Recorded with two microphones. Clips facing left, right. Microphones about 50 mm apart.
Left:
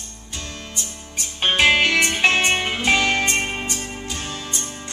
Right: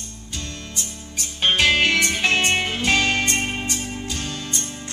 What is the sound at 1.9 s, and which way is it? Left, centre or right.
Music, centre.